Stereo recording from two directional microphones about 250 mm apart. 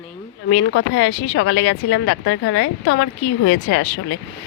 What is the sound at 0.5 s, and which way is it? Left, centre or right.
Speech, left.